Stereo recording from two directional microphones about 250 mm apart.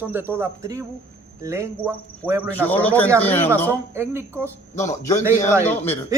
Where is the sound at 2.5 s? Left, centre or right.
Centre.